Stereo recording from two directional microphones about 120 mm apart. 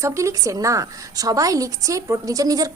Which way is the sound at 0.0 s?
25° right (ahead or behind).